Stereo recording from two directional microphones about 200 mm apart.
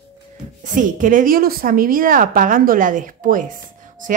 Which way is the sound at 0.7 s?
40° right (ahead or behind).